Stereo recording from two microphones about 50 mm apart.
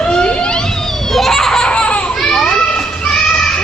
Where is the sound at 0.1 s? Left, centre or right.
Left.